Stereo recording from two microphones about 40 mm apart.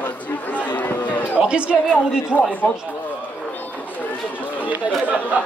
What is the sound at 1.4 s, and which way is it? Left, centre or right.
Speech, right.